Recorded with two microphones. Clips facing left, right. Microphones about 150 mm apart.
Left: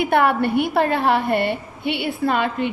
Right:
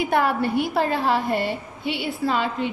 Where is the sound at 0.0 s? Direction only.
65° left (ahead or behind).